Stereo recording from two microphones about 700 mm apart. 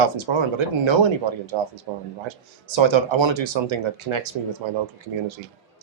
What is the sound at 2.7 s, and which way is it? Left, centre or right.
Speech, right.